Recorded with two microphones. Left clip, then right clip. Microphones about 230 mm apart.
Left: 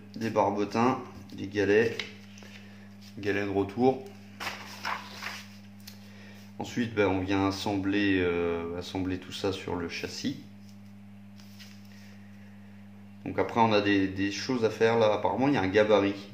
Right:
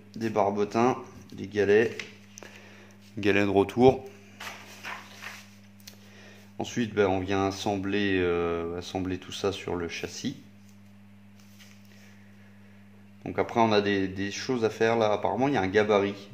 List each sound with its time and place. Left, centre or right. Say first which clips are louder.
0.1 s speech: right 1 dB; right
3.2 s speech: right 6 dB; right
6.5 s speech: right 2 dB; right
13.2 s speech: right 1 dB; right